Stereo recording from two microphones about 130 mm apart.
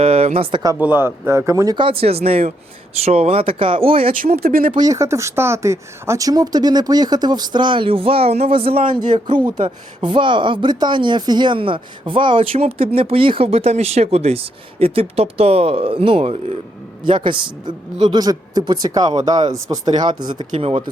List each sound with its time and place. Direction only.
0.0 s speech: 50° right (ahead or behind)
0.5 s speech: 25° right (ahead or behind)
0.8 s speech: 15° right (ahead or behind)
1.7 s speech: 45° right (ahead or behind)
4.1 s speech: 90° right
4.7 s speech: 30° right (ahead or behind); by 8.8 s 45° right (ahead or behind)
8.9 s speech: 35° right (ahead or behind)
20.6 s speech: 50° right (ahead or behind)